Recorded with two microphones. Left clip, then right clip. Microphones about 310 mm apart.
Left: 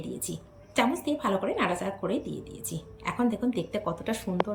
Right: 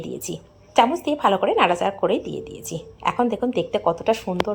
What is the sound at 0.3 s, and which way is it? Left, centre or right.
Speech, right.